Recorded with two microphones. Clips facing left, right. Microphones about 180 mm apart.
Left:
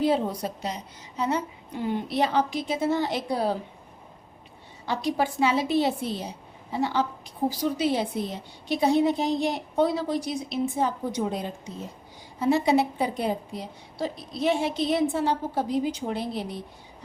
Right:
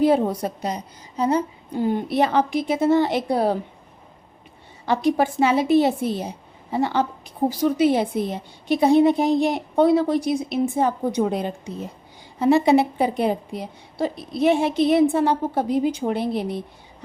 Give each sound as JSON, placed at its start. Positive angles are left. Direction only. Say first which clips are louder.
{"t": 0.0, "sound": "a woman's voice", "louder": "right 6 dB", "side_deg": -55}
{"t": 4.9, "sound": "a woman's voice", "louder": "right 6 dB", "side_deg": -55}